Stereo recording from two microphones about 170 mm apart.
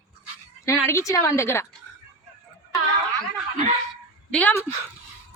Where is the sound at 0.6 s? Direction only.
15° left (ahead or behind).